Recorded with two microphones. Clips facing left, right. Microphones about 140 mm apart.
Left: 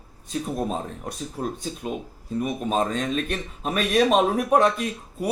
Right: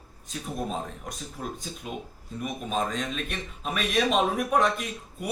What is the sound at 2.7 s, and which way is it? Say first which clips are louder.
A man's voice: left 5 dB; 35° left (ahead or behind).